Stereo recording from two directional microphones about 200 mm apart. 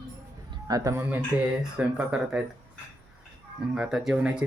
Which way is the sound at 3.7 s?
5° right (ahead or behind).